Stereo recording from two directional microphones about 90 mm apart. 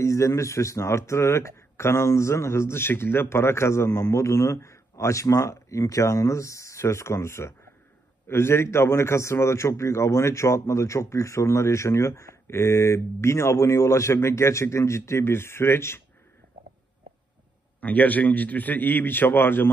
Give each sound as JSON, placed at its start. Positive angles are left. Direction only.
{"t": 0.0, "sound": "a man's voice", "side_deg": 35}
{"t": 17.7, "sound": "a man's voice", "side_deg": 20}